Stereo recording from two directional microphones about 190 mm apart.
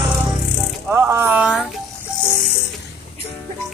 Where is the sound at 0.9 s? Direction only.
10° right (ahead or behind).